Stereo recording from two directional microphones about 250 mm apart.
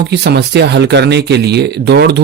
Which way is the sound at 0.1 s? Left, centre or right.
Right.